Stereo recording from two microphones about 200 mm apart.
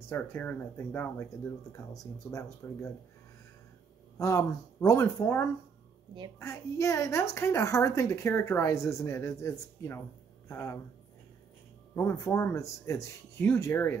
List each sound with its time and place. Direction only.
0.1 s a woman's voice: 10° left (ahead or behind)
4.2 s a woman's voice: 15° left (ahead or behind)
6.4 s a woman's voice: 15° left (ahead or behind)
11.9 s a woman's voice: 15° left (ahead or behind)